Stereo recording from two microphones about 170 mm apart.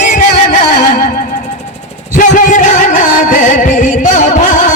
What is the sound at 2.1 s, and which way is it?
Music, 50° left (ahead or behind).